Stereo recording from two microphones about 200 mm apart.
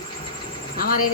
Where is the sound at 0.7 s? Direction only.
45° left (ahead or behind).